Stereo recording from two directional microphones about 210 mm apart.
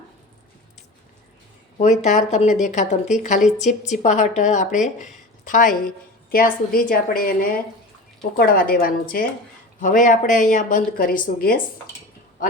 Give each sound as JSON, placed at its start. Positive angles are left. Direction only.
{"t": 1.8, "sound": "a woman's voice", "side_deg": 35}